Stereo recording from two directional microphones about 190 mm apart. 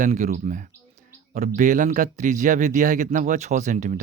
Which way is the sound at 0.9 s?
40° right (ahead or behind).